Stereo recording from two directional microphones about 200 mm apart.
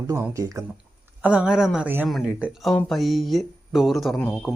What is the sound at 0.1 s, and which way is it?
Speech, 15° right (ahead or behind).